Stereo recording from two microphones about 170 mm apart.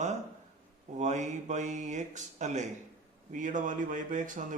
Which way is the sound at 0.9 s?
45° right (ahead or behind).